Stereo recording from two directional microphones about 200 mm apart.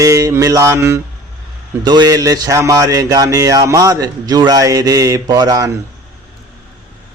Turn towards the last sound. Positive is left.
turn(degrees=-20)  # may be behind; listen again after turning